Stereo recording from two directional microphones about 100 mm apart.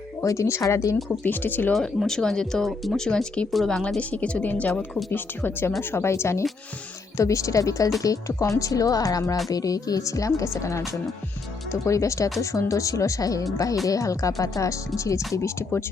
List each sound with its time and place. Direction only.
0.2 s speech: 30° left (ahead or behind)
1.2 s speech: 20° left (ahead or behind)
1.7 s speech: 5° left (ahead or behind); by 15.8 s 25° left (ahead or behind)